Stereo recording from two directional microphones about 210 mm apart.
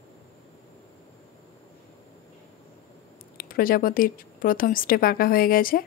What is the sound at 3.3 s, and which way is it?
A woman's voice, 45° left (ahead or behind).